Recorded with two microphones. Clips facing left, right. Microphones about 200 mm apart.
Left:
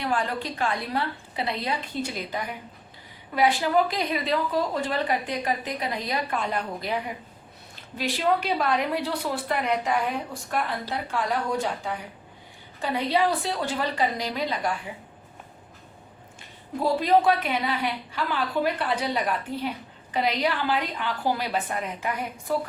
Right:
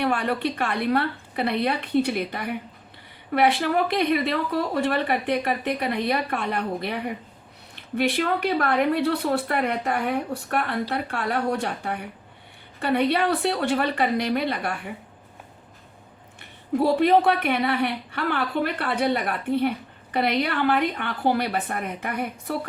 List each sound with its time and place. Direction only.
0.0 s a woman's voice: 65° right (ahead or behind)
16.4 s a woman's voice: 65° right (ahead or behind)